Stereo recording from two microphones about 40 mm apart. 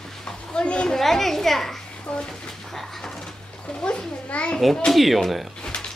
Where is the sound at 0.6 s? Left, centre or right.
Left.